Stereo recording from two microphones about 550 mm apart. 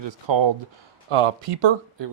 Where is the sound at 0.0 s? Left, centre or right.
Right.